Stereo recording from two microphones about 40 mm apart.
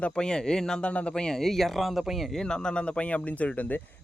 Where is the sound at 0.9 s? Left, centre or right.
Left.